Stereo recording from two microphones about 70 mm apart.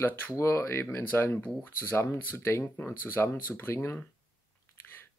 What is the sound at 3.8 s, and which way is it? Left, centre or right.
Speech, centre.